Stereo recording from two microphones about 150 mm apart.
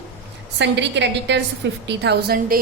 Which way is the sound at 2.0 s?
90° right.